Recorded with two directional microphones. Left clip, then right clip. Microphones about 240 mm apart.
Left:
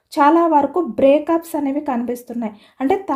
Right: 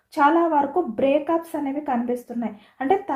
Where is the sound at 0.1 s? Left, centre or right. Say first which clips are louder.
Left 5 dB; left.